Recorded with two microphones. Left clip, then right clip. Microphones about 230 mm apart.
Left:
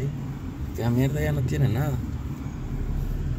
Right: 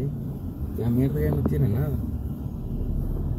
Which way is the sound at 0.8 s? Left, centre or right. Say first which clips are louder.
Right 1 dB; centre.